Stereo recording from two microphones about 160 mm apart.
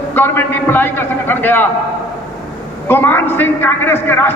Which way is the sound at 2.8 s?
15° left (ahead or behind).